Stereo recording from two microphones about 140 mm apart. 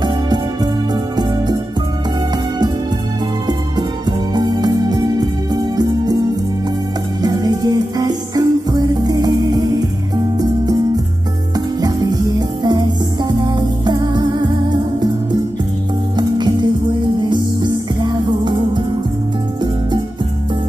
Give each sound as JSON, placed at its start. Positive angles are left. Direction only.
{"t": 4.4, "sound": "music", "side_deg": -30}
{"t": 7.2, "sound": "music", "side_deg": -30}
{"t": 16.2, "sound": "music", "side_deg": -35}